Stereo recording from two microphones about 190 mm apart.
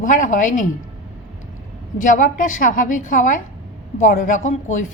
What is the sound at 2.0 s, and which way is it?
A woman's voice, 45° left (ahead or behind).